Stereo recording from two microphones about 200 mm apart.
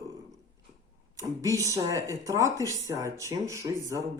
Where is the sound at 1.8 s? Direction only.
15° right (ahead or behind).